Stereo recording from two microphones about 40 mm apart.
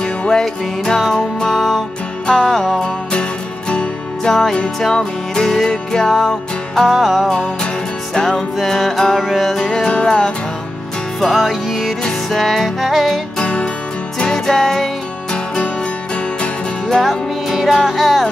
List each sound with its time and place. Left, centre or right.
0.0 s music: left
3.1 s music: left
6.9 s music: centre
8.1 s music: centre
9.6 s music: centre
11.1 s music: centre
13.4 s music: left; by 14.9 s centre
17.5 s music: centre